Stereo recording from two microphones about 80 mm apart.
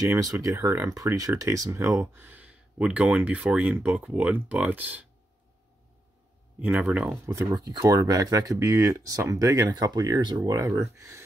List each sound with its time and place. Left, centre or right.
0.0 s speech: right
2.0 s speech: right
6.9 s speech: centre
7.5 s speech: right